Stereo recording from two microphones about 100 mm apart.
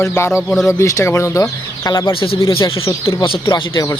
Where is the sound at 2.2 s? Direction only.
60° left (ahead or behind).